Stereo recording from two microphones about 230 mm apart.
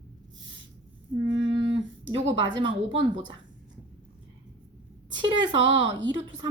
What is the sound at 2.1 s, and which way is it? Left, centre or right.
Speech, right.